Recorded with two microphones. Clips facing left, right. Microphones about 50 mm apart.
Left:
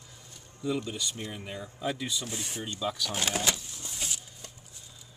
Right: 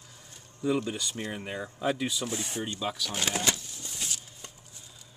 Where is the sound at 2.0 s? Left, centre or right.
Centre.